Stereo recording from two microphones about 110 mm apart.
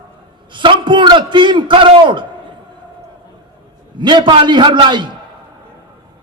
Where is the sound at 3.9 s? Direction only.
45° right (ahead or behind).